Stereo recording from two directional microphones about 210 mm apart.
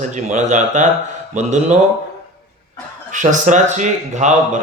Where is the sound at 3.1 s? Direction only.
35° right (ahead or behind).